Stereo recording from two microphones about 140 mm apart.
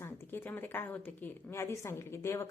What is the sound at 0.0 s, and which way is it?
Speech, 15° left (ahead or behind).